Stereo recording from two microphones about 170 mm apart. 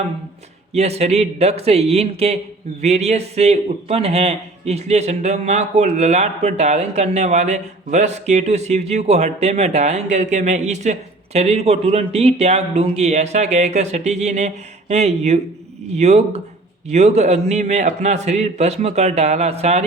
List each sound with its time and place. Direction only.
0.7 s a man's voice: 40° right (ahead or behind)